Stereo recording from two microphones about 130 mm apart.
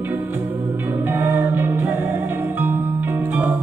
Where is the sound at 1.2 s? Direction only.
15° right (ahead or behind).